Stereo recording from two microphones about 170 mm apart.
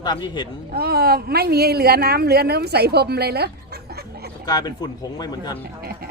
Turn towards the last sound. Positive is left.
turn(degrees=25)  # may be behind; listen again after turning